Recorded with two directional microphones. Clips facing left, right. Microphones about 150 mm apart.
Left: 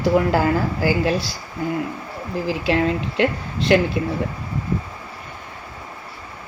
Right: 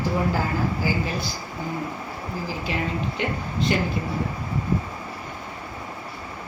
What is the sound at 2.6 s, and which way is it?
Speech, 90° left.